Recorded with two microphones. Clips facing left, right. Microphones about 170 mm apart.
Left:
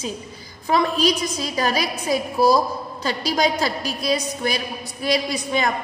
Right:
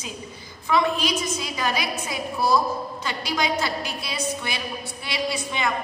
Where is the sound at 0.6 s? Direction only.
40° left (ahead or behind).